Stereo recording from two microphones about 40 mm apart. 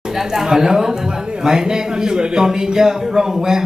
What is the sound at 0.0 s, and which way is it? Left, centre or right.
A man's voice, centre.